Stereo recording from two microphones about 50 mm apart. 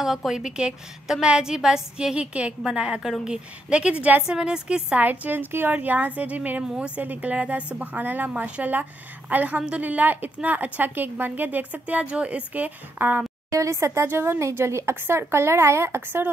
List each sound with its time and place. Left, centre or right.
0.3 s a woman's voice: centre
4.9 s a woman's voice: right
13.5 s a woman's voice: right
14.0 s a woman's voice: right
14.5 s speech: right